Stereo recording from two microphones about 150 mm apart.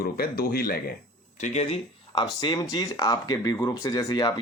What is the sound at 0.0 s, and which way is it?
Speech, 85° left.